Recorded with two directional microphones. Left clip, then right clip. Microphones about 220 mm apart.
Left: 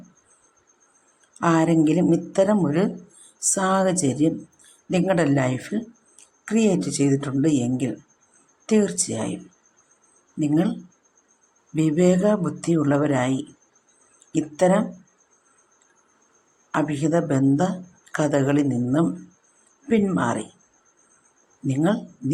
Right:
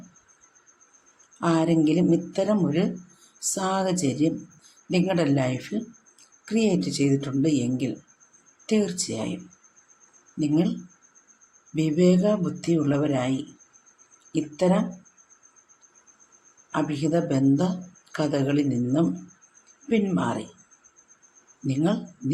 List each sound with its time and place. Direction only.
1.4 s speech: 15° left (ahead or behind)
9.0 s speech: 15° left (ahead or behind)
10.4 s speech: 15° left (ahead or behind)
16.7 s speech: 15° left (ahead or behind)